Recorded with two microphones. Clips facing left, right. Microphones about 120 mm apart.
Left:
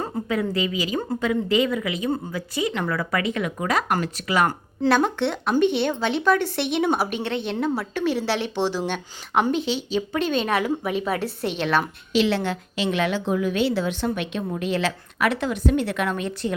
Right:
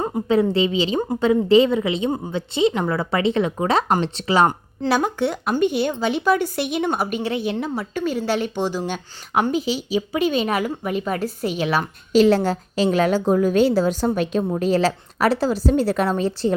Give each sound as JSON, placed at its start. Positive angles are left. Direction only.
{"t": 0.0, "sound": "a woman's voice", "side_deg": -30}
{"t": 4.9, "sound": "speech", "side_deg": -5}
{"t": 12.1, "sound": "a woman's voice", "side_deg": -40}